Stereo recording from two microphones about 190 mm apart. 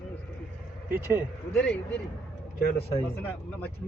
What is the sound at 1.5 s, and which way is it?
Speech, 5° left (ahead or behind).